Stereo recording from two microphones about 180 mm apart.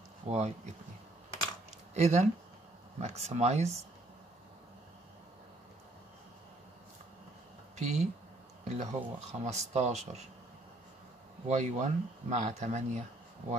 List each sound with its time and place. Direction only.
0.3 s speech: 40° right (ahead or behind)
2.0 s speech: 40° right (ahead or behind)
7.7 s speech: 40° right (ahead or behind)
11.4 s speech: 40° right (ahead or behind)